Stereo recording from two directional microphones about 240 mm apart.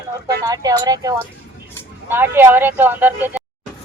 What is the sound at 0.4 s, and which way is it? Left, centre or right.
Speech, centre.